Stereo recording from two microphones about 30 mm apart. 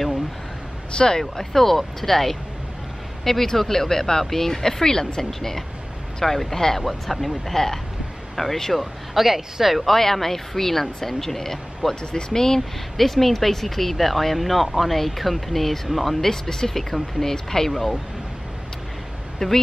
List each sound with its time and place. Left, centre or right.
0.9 s speech: left
1.3 s speech: centre
6.8 s speech: centre
8.7 s speech: centre
9.8 s speech: centre
11.9 s speech: left
12.3 s speech: centre
12.9 s speech: centre
16.3 s speech: centre
19.4 s speech: centre